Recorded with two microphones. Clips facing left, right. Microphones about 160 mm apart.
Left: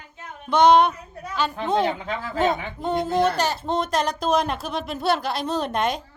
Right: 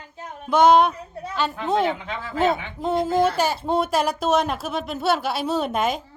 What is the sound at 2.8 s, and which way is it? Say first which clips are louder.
Speech: right 1 dB; 5° right (ahead or behind).